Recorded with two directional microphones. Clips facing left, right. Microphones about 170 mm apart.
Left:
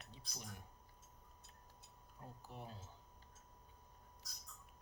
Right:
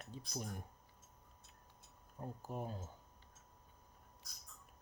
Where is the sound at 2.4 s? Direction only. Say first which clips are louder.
Right 9 dB; 45° right (ahead or behind).